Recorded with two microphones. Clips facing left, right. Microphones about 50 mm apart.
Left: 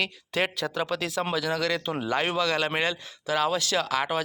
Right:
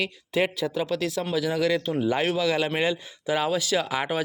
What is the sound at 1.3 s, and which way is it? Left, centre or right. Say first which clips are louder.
Speech: right 5 dB; centre.